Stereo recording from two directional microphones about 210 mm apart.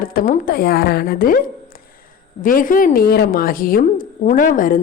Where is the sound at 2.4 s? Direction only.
40° left (ahead or behind).